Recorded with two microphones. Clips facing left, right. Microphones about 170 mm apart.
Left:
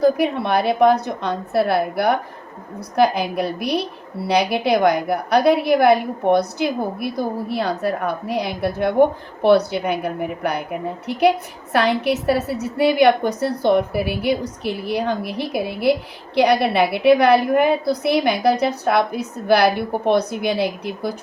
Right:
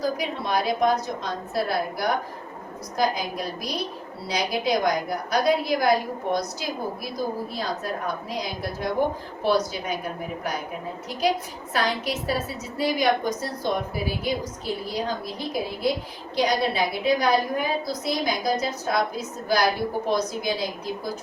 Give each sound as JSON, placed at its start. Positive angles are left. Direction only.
{"t": 0.0, "sound": "a woman's voice", "side_deg": 60}